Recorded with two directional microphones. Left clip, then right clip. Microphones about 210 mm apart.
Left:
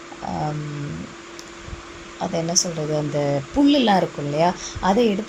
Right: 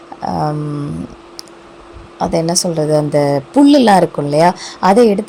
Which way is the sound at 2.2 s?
40° right (ahead or behind).